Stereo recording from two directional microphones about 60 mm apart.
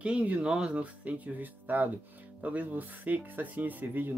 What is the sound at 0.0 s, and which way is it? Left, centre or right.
Speech, right.